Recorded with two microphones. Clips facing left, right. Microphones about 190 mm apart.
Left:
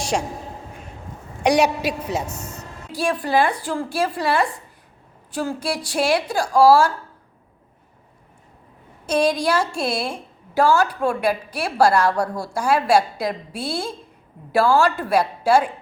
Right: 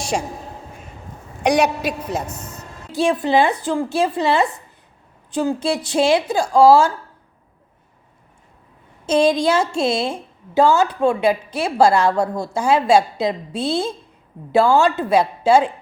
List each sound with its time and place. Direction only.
1.8 s a man's voice: 10° left (ahead or behind)
2.4 s a woman's voice: 30° right (ahead or behind)
9.0 s a woman's voice: 25° right (ahead or behind)